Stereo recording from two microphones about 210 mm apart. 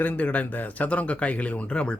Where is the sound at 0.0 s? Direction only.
5° left (ahead or behind).